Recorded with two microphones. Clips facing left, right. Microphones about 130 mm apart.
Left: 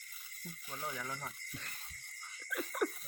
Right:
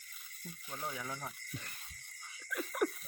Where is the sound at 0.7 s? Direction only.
10° right (ahead or behind).